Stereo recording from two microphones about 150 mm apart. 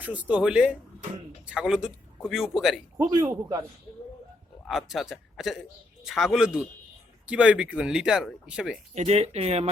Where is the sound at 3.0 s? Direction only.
20° right (ahead or behind).